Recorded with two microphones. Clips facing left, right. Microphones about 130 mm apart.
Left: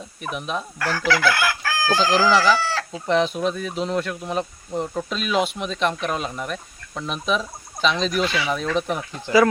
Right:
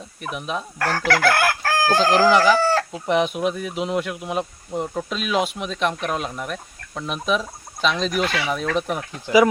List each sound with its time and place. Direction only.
0.2 s speech: centre (ahead or behind)
0.8 s chicken: 55° right (ahead or behind)
2.9 s speech: 10° right (ahead or behind)